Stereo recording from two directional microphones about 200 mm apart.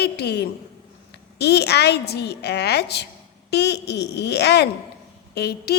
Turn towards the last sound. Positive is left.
turn(degrees=55)  # may be behind; listen again after turning